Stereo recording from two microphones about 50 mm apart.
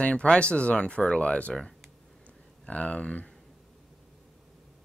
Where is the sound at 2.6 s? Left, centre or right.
Left.